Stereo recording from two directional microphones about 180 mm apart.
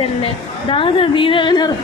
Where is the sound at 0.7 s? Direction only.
30° left (ahead or behind).